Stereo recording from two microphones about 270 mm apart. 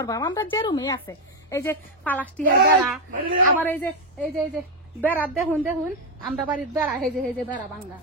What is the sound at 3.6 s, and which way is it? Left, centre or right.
A woman's voice, centre.